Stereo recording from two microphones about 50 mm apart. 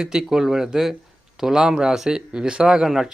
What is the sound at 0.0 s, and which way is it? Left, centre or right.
A man's voice, centre.